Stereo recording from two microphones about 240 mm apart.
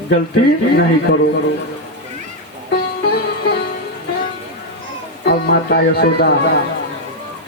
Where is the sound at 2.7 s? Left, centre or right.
Left.